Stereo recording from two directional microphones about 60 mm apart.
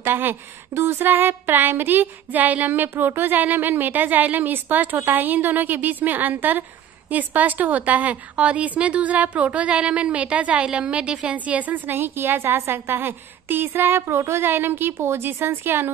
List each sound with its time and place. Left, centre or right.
0.0 s a woman's voice: right